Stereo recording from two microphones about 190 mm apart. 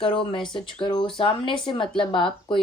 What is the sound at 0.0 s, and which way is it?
Speech, 30° left (ahead or behind).